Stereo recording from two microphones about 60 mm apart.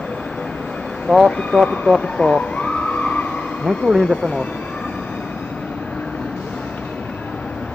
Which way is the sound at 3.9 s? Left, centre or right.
Centre.